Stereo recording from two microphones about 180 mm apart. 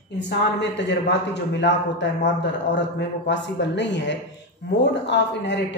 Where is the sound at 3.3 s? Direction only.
80° left.